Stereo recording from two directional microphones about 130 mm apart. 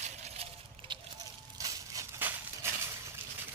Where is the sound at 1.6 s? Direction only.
25° right (ahead or behind).